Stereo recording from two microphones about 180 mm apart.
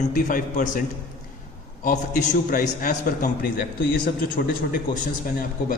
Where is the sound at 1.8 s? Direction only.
50° left (ahead or behind).